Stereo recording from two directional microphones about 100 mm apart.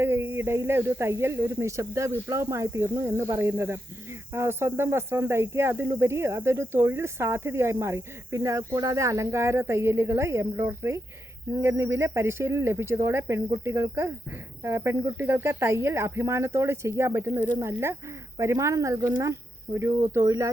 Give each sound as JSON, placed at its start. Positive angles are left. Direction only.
{"t": 0.0, "sound": "speech", "side_deg": -25}